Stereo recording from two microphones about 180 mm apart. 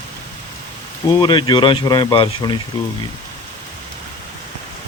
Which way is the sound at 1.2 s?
25° left (ahead or behind).